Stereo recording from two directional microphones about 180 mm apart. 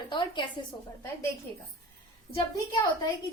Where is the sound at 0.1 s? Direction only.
25° left (ahead or behind).